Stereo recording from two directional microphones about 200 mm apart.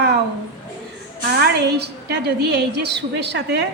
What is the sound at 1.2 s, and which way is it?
A woman's voice, 55° right (ahead or behind).